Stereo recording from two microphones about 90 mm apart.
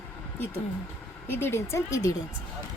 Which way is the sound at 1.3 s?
25° left (ahead or behind).